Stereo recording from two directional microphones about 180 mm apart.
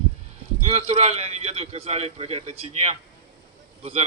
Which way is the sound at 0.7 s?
35° right (ahead or behind).